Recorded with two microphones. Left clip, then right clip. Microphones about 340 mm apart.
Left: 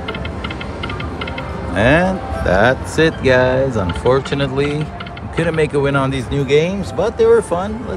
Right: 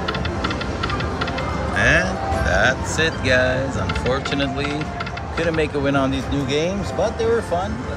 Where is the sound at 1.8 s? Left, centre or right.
Centre.